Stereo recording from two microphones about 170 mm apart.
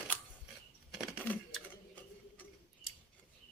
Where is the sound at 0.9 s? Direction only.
Centre (ahead or behind).